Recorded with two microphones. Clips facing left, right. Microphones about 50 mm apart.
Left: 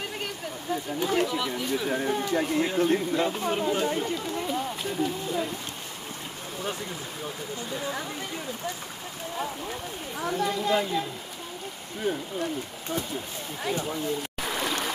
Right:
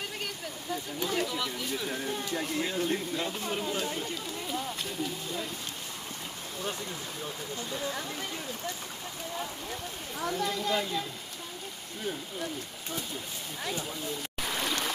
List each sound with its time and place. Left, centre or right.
0.9 s speech: centre
1.9 s speech: left
7.7 s speech: centre
10.1 s speech: centre
13.7 s speech: centre
14.4 s stream: centre